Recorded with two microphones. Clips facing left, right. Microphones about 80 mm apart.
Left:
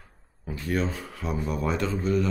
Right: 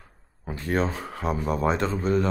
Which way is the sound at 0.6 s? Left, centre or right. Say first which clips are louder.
Right 2 dB; right.